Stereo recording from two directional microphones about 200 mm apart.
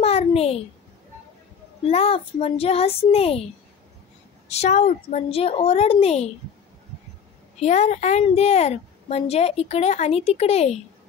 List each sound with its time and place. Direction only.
0.0 s a sound: 30° left (ahead or behind)
1.9 s speech: 30° left (ahead or behind)
4.5 s a woman's voice: 35° left (ahead or behind)
7.5 s a woman's voice: 35° left (ahead or behind)